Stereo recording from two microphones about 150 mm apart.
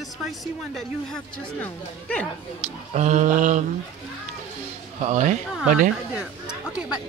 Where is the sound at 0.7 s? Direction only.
5° left (ahead or behind).